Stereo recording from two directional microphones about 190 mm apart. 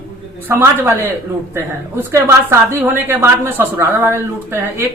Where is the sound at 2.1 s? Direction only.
15° right (ahead or behind).